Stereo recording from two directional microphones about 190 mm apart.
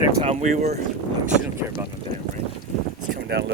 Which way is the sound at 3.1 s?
60° right (ahead or behind).